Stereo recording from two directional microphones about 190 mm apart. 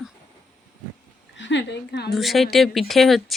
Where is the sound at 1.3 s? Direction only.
70° left (ahead or behind).